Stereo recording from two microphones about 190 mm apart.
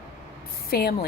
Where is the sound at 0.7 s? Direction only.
55° left (ahead or behind).